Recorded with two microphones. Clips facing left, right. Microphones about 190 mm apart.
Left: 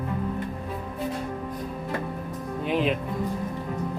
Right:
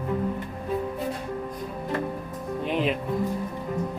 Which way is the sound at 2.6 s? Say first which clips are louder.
Left 1 dB; centre (ahead or behind).